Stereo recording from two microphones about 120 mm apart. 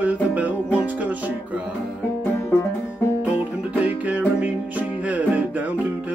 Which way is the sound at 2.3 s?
20° left (ahead or behind).